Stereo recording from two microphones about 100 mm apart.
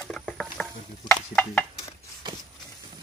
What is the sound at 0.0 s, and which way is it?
Patter, 5° left (ahead or behind).